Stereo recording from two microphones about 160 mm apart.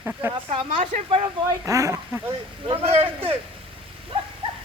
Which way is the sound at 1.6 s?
20° right (ahead or behind).